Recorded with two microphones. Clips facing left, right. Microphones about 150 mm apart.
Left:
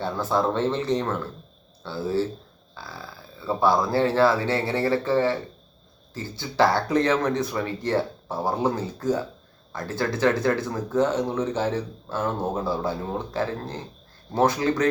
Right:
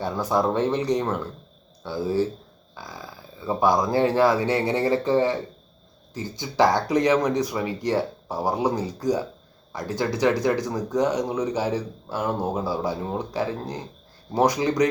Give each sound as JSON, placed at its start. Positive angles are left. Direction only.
{"t": 0.0, "sound": "speech", "side_deg": -15}